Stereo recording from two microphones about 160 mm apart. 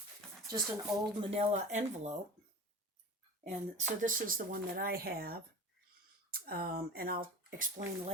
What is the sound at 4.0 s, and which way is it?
Speech, 55° right (ahead or behind).